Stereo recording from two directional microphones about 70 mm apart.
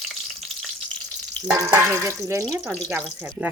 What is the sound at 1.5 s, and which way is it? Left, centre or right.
Frying, right.